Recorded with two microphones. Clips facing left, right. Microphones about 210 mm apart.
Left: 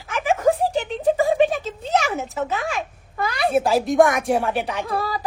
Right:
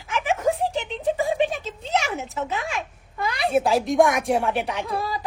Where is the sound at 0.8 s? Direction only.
Centre (ahead or behind).